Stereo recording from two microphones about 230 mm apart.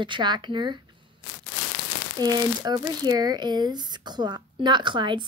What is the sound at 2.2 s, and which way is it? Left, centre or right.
Speech, centre.